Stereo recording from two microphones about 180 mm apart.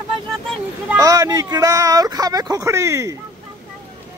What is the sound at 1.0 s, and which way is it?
Speech, 20° right (ahead or behind).